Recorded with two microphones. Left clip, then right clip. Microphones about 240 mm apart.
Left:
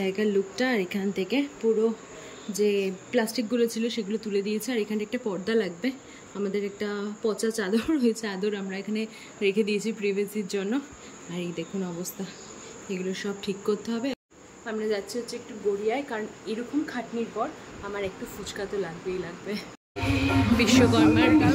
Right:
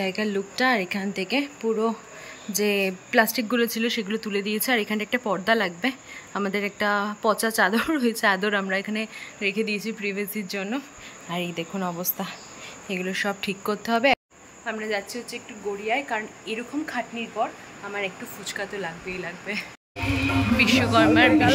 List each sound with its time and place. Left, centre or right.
0.0 s speech: centre
20.5 s speech: centre
20.9 s speech: centre